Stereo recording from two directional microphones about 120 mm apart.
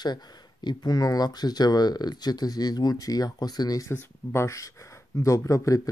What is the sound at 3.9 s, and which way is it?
Speech, 20° left (ahead or behind).